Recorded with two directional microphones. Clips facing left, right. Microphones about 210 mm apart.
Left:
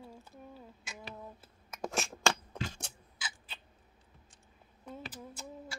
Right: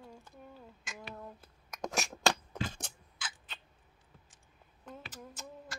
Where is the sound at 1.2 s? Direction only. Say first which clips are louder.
Right 1 dB; 5° left (ahead or behind).